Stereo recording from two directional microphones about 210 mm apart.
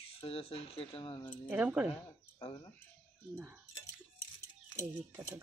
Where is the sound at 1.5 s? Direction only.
5° right (ahead or behind).